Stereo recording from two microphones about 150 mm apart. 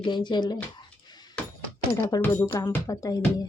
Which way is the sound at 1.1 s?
30° left (ahead or behind).